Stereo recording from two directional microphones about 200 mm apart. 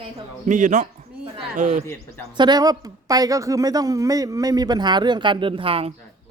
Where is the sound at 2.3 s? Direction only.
20° right (ahead or behind).